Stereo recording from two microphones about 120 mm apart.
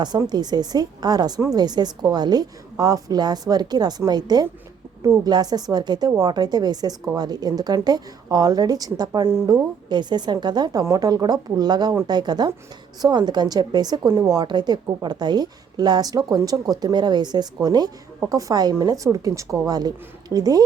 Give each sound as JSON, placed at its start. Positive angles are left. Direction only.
{"t": 0.3, "sound": "a woman's voice", "side_deg": -35}